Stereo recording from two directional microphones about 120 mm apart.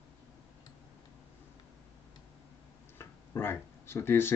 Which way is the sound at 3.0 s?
20° left (ahead or behind).